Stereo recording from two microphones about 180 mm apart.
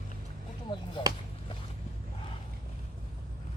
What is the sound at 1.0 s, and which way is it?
Speech, 25° left (ahead or behind).